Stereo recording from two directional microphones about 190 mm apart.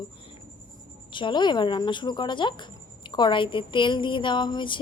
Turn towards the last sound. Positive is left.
turn(degrees=25)  # may be behind; listen again after turning